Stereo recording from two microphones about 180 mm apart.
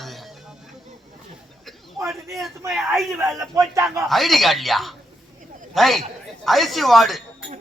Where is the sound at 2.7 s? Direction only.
Centre (ahead or behind).